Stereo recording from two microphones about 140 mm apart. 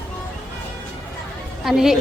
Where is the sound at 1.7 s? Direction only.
5° right (ahead or behind).